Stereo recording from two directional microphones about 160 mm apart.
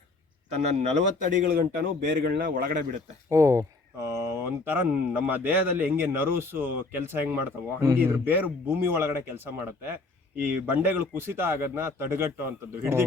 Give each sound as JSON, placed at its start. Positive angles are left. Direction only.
{"t": 0.5, "sound": "speech", "side_deg": -45}
{"t": 1.5, "sound": "a man's voice", "side_deg": -70}
{"t": 3.2, "sound": "speech", "side_deg": -20}